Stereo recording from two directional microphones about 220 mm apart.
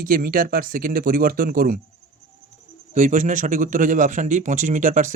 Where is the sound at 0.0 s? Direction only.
40° right (ahead or behind).